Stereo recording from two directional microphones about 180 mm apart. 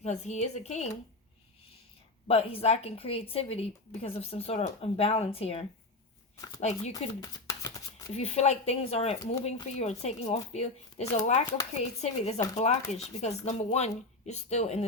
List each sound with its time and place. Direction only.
0.0 s speech: 40° left (ahead or behind)
2.2 s speech: 35° left (ahead or behind)
7.2 s a sound: 20° left (ahead or behind)
8.1 s speech: 40° left (ahead or behind)